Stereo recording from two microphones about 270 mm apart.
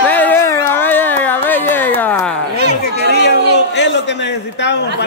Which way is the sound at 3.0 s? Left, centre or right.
Left.